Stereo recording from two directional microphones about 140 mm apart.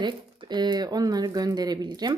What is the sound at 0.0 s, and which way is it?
Speech, 30° right (ahead or behind).